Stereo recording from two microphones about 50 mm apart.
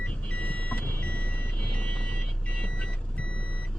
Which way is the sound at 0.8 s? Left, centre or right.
Left.